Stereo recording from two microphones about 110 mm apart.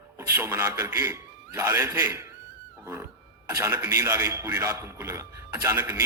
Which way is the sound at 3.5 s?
25° right (ahead or behind).